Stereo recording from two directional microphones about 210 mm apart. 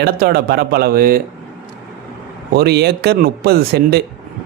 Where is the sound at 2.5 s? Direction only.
50° right (ahead or behind).